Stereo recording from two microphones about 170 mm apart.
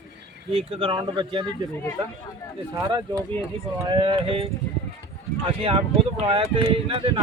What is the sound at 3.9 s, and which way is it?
Speech, 30° right (ahead or behind).